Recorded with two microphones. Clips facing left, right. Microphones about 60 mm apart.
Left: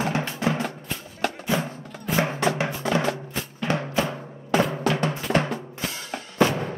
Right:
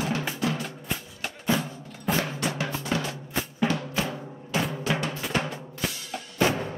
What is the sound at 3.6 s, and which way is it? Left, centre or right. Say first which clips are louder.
Music: left 4 dB; left.